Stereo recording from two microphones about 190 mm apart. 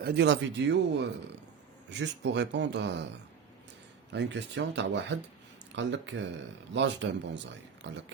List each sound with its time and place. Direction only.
0.0 s a man's voice: 60° right (ahead or behind)
4.1 s a man's voice: 65° right (ahead or behind)